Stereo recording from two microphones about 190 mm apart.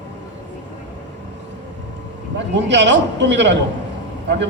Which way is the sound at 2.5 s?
70° right (ahead or behind).